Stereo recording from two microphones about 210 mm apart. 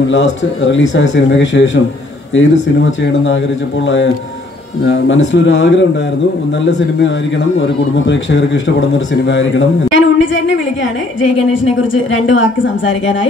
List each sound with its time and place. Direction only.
0.1 s a man's voice: 60° left (ahead or behind)
7.6 s a man's voice: 60° left (ahead or behind)
12.1 s a man's voice: 60° left (ahead or behind)